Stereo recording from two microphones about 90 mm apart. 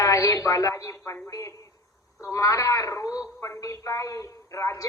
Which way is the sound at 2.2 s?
35° left (ahead or behind).